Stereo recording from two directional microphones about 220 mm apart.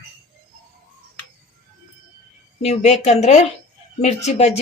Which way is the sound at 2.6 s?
30° left (ahead or behind).